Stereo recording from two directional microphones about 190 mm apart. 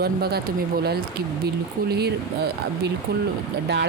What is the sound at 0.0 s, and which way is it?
Speech, 55° right (ahead or behind).